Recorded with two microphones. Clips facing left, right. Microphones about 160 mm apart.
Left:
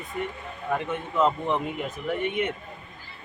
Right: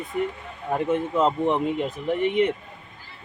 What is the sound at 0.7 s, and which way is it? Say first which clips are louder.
Speech: right 5 dB; 30° right (ahead or behind).